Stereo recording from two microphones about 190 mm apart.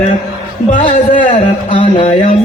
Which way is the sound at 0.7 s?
45° left (ahead or behind).